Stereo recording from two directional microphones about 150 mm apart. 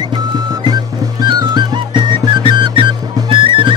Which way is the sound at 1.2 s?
30° right (ahead or behind).